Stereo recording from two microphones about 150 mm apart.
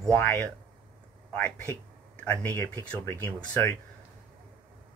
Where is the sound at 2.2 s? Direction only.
15° left (ahead or behind).